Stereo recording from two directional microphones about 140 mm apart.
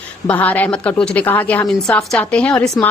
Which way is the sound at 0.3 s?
10° left (ahead or behind).